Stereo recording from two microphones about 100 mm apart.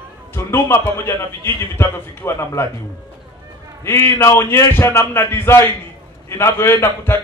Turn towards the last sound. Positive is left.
turn(degrees=25)  # may be behind; listen again after turning